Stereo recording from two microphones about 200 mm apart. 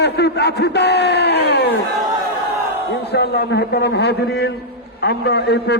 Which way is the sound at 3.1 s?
55° left (ahead or behind).